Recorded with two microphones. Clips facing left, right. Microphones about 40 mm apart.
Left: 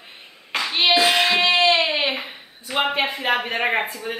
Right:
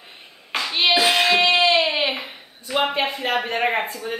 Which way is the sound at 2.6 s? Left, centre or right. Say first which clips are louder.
Even; centre.